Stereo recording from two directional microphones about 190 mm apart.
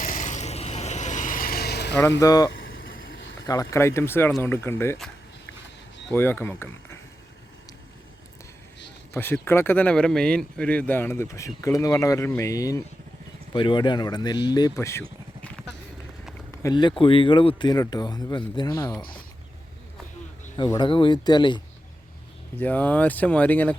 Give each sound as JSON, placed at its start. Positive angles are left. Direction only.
{"t": 0.0, "sound": "vehicle", "side_deg": 40}
{"t": 2.0, "sound": "speech", "side_deg": 15}
{"t": 6.1, "sound": "speech", "side_deg": 10}
{"t": 9.1, "sound": "speech", "side_deg": 10}
{"t": 15.4, "sound": "a sound", "side_deg": 5}
{"t": 16.6, "sound": "speech", "side_deg": 25}
{"t": 20.6, "sound": "speech", "side_deg": 25}
{"t": 22.5, "sound": "speech", "side_deg": 10}